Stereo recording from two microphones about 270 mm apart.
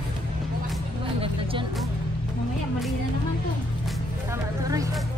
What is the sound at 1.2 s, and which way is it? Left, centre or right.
Music, centre.